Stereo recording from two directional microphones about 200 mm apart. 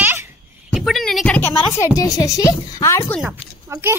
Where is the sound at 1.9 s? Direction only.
20° left (ahead or behind).